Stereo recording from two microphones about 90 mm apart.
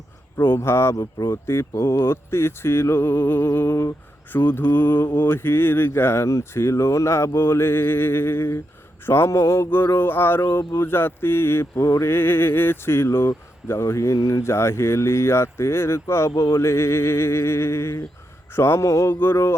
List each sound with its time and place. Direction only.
0.3 s speech: 25° left (ahead or behind)